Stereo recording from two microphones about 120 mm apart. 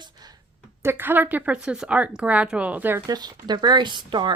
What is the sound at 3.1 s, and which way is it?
Speech, 35° right (ahead or behind).